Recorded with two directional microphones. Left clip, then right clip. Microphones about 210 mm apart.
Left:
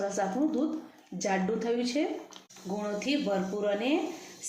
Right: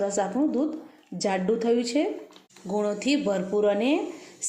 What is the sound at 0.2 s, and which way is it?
A woman's voice, 40° right (ahead or behind).